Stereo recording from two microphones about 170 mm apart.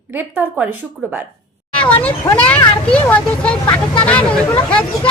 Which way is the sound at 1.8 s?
10° left (ahead or behind).